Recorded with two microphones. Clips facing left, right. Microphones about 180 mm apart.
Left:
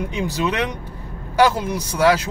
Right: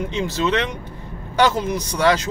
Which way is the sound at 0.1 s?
10° left (ahead or behind).